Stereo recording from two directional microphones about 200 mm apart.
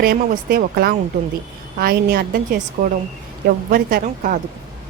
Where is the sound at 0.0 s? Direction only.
50° right (ahead or behind).